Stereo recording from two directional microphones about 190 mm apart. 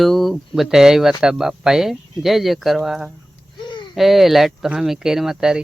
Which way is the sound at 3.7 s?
25° left (ahead or behind).